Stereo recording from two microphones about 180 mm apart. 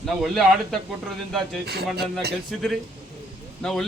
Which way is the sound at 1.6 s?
60° right (ahead or behind).